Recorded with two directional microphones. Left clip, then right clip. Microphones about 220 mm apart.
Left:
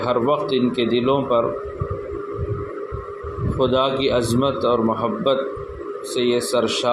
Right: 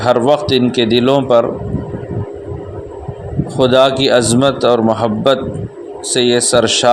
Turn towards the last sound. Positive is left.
turn(degrees=-45)  # may be behind; listen again after turning